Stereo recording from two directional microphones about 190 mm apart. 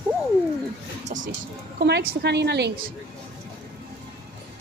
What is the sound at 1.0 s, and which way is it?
Music, 40° right (ahead or behind).